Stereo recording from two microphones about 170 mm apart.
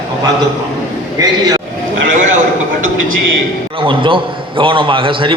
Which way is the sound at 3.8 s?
30° right (ahead or behind).